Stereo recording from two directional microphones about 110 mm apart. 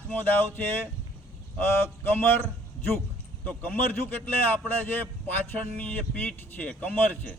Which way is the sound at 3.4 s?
15° left (ahead or behind).